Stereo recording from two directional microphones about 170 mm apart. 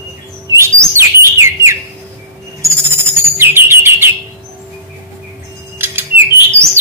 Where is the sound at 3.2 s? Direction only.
15° right (ahead or behind).